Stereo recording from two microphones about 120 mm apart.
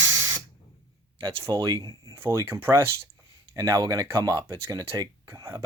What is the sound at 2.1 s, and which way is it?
Speech, 25° right (ahead or behind).